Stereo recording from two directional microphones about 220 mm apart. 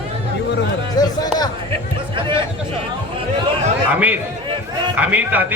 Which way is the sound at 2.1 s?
20° right (ahead or behind).